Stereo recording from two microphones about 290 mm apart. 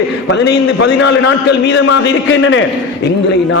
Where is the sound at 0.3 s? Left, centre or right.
Left.